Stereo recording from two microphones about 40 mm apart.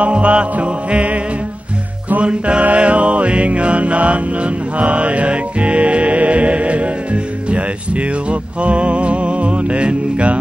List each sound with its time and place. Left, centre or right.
0.0 s music: right
2.2 s music: right